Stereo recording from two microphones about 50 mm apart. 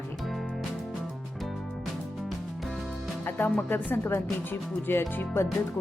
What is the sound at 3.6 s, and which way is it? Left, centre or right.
Speech, left.